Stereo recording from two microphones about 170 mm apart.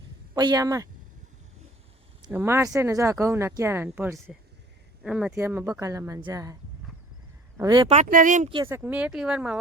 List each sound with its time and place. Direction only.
0.3 s speech: 25° right (ahead or behind)
2.3 s speech: 15° right (ahead or behind)
7.9 s speech: 45° right (ahead or behind)
8.6 s speech: 10° right (ahead or behind)